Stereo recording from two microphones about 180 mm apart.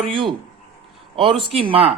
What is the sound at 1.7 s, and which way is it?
Speech, 30° right (ahead or behind).